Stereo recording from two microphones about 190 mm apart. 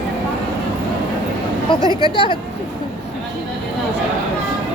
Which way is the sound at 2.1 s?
25° left (ahead or behind).